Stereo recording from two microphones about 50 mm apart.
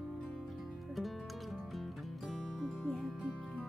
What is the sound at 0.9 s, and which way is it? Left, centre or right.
Music, centre.